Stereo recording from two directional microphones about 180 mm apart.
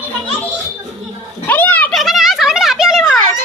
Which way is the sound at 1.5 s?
10° left (ahead or behind).